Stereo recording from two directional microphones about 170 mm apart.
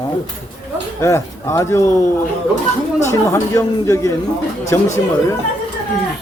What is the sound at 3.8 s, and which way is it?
Speech, 15° left (ahead or behind).